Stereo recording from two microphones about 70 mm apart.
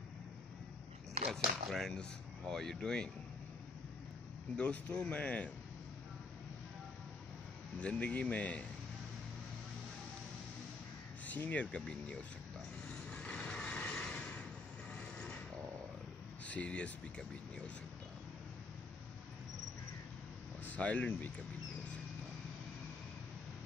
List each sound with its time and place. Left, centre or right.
1.3 s speech: centre
4.6 s speech: centre
7.8 s speech: centre
11.2 s speech: left
13.1 s vehicle: centre
16.4 s speech: centre
20.6 s speech: centre